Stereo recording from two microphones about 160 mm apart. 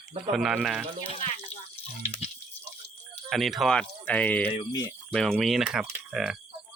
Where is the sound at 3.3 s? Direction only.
Centre (ahead or behind).